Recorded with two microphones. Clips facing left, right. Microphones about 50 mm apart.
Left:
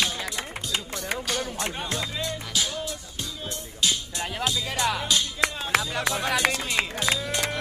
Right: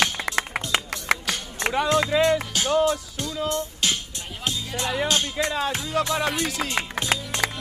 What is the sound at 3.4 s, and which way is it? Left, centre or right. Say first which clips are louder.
Speech: right 2 dB; right.